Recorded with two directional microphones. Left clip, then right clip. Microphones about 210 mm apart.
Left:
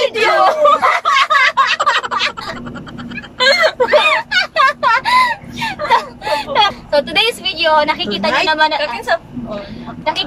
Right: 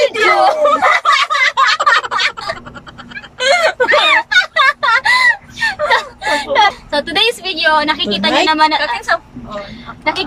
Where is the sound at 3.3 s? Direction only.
5° right (ahead or behind).